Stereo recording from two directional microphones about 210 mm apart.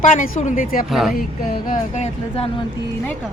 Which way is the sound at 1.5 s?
35° left (ahead or behind).